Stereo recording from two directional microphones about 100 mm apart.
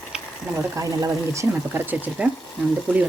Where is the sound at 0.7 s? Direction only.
30° right (ahead or behind).